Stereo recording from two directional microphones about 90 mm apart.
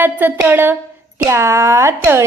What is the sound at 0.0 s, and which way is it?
Speech, 20° right (ahead or behind).